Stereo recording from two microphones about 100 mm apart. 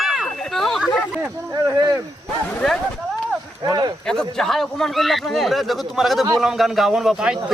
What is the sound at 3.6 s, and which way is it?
Speech, 40° right (ahead or behind).